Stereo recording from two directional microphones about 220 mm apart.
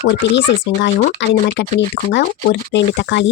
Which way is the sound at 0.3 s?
55° left (ahead or behind).